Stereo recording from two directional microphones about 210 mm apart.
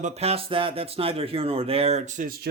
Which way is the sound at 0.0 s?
30° right (ahead or behind).